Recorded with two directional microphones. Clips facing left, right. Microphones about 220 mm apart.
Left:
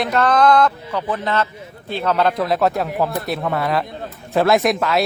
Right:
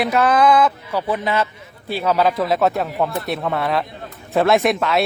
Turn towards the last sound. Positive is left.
turn(degrees=0)  # may be behind; listen again after turning